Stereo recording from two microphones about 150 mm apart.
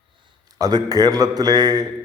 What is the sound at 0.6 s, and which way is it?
A man's voice, 25° right (ahead or behind).